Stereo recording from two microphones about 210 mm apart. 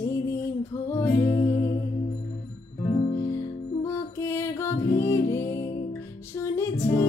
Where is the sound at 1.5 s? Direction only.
50° left (ahead or behind).